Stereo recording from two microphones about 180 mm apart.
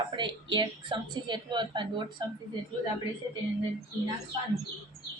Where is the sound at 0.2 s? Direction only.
25° right (ahead or behind).